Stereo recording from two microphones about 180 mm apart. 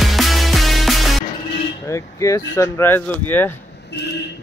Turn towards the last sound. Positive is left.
turn(degrees=10)  # may be behind; listen again after turning